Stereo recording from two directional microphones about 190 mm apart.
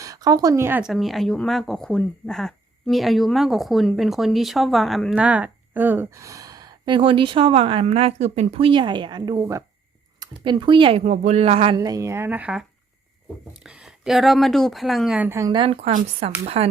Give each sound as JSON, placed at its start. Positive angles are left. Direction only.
{"t": 0.0, "sound": "speech", "side_deg": -20}
{"t": 11.8, "sound": "speech", "side_deg": -15}
{"t": 13.7, "sound": "a woman's voice", "side_deg": -5}